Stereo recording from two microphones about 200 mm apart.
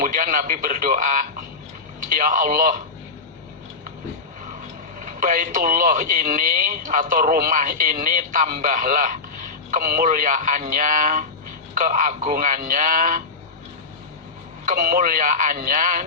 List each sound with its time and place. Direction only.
0.0 s a man's voice: 45° right (ahead or behind)
4.9 s a man's voice: 45° right (ahead or behind)
14.6 s a man's voice: 45° right (ahead or behind)